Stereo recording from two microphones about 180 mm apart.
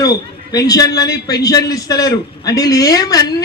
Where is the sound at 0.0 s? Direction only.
20° left (ahead or behind).